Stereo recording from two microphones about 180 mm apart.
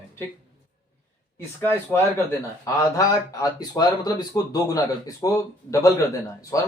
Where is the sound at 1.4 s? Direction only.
10° left (ahead or behind).